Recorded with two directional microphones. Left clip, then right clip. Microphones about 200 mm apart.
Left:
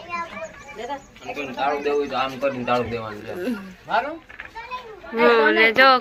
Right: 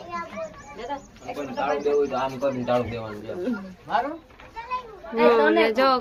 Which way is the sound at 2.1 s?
15° left (ahead or behind).